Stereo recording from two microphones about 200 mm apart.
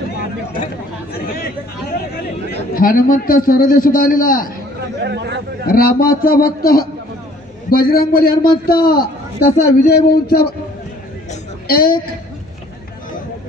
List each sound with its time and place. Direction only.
1.3 s a man's voice: 50° left (ahead or behind)
5.0 s speech: 55° right (ahead or behind)
5.7 s a man's voice: 45° left (ahead or behind)
11.6 s a woman's voice: 45° left (ahead or behind)